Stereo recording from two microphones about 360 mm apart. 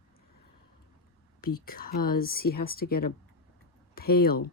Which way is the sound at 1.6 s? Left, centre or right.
Left.